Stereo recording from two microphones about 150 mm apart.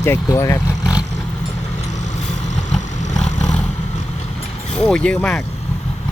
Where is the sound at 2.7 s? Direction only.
50° left (ahead or behind).